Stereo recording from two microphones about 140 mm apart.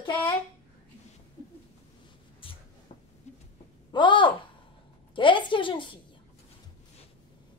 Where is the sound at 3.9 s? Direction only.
35° left (ahead or behind).